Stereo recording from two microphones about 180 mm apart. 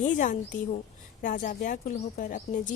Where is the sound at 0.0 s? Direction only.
45° left (ahead or behind).